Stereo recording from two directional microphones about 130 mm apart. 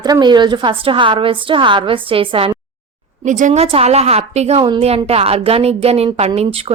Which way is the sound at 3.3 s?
75° right (ahead or behind).